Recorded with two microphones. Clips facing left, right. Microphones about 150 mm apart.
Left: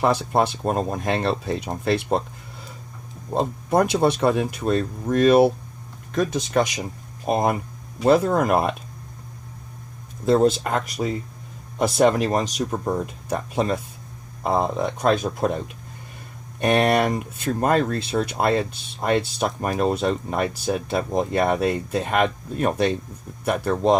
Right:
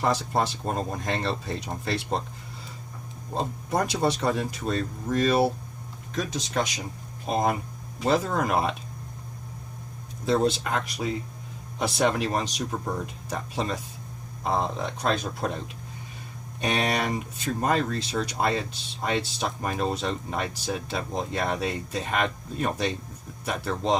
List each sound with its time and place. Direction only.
0.0 s speech: 60° left (ahead or behind)
3.3 s speech: 60° left (ahead or behind)
8.0 s speech: 55° left (ahead or behind)
10.2 s speech: 45° left (ahead or behind)